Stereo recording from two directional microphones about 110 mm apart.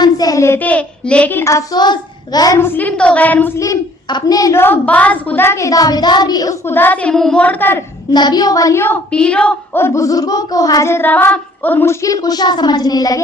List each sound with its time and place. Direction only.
0.0 s a woman's voice: 35° left (ahead or behind)
1.7 s a child's voice: 40° left (ahead or behind)
2.6 s a woman's voice: 20° left (ahead or behind)
4.1 s speech: 35° left (ahead or behind)
6.7 s a woman's voice: 20° left (ahead or behind)
8.1 s speech: 40° left (ahead or behind); by 9.0 s 25° left (ahead or behind)
9.1 s a woman's voice: 10° left (ahead or behind)
9.7 s speech: 25° left (ahead or behind)